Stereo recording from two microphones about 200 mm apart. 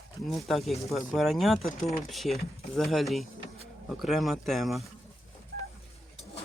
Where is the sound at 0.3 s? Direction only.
Centre (ahead or behind).